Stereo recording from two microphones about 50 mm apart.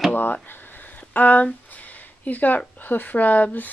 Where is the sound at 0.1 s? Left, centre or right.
Left.